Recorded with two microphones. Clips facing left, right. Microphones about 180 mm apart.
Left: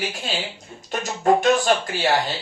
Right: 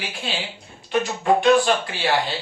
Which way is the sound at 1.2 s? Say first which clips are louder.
Even; 45° left (ahead or behind).